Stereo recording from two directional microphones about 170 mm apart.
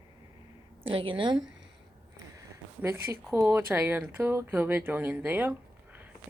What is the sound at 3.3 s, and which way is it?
Speech, 10° right (ahead or behind).